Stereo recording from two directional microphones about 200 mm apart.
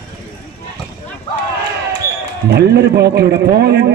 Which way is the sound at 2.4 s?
55° right (ahead or behind).